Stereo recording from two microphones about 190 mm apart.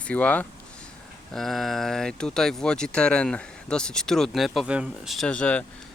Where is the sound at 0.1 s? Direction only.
5° left (ahead or behind).